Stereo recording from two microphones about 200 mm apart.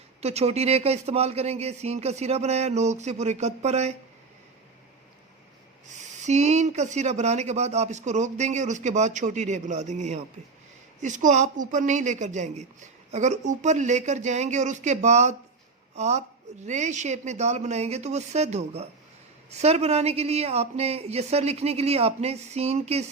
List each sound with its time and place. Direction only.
0.2 s speech: 30° right (ahead or behind)
5.9 s speech: 35° right (ahead or behind)